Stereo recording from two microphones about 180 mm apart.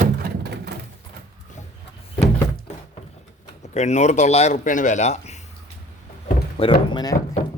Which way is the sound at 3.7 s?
40° left (ahead or behind).